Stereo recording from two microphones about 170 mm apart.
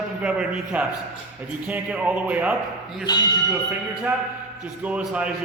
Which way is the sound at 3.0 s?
25° left (ahead or behind).